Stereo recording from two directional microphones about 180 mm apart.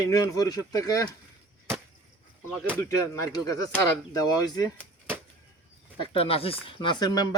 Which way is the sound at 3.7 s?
20° left (ahead or behind).